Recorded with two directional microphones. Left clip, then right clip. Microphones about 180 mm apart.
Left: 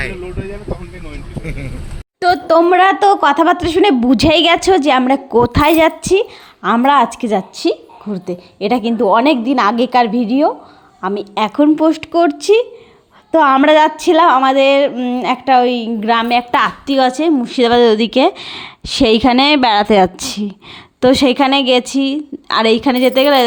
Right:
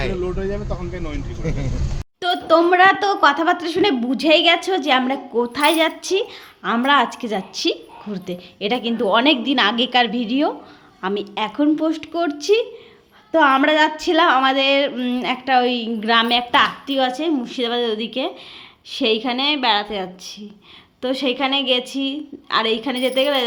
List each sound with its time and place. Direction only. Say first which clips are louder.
2.2 s a woman's voice: left 5 dB; 45° left (ahead or behind)
11.3 s speech: left 8 dB; 50° left (ahead or behind); by 15.2 s 30° left (ahead or behind)
15.2 s speech: left 6 dB; 45° left (ahead or behind)
16.5 s a woman's voice: left 3 dB; 55° left (ahead or behind)